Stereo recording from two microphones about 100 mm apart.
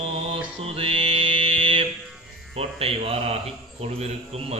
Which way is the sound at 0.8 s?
70° right (ahead or behind).